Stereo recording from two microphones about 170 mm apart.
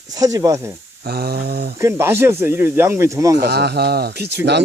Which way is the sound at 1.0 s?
65° right (ahead or behind).